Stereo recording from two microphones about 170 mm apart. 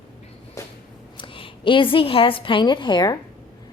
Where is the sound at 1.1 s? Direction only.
30° left (ahead or behind).